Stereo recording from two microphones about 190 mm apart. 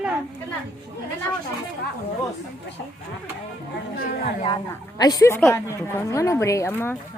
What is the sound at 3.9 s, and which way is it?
Speech, 55° left (ahead or behind).